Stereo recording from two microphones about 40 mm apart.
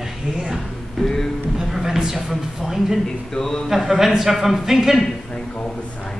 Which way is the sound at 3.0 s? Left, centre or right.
Centre.